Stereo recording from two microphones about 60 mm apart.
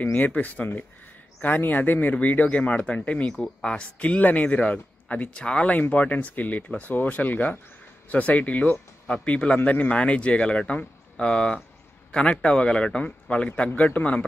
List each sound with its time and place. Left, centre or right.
0.0 s speech: left
3.3 s a man's voice: centre
3.7 s a man's voice: left